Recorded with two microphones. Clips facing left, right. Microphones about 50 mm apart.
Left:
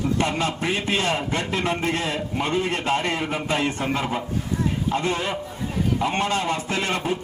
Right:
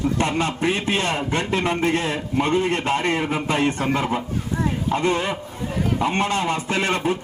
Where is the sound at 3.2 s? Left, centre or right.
Centre.